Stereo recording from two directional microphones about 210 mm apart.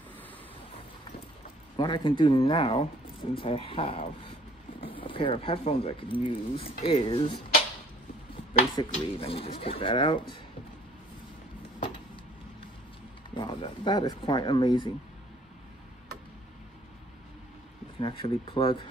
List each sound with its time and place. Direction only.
1.8 s speech: 20° left (ahead or behind)
8.7 s speech: 25° left (ahead or behind)
13.3 s speech: 25° left (ahead or behind)
17.9 s speech: 25° left (ahead or behind)